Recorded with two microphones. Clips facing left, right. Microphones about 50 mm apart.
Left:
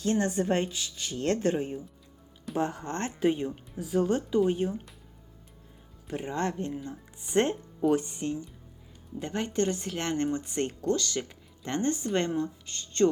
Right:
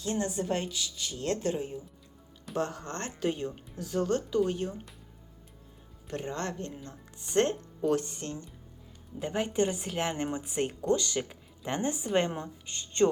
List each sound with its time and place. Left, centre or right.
0.0 s speech: left
2.6 s speech: centre
6.1 s speech: centre
9.1 s speech: centre
10.8 s speech: centre
12.3 s speech: right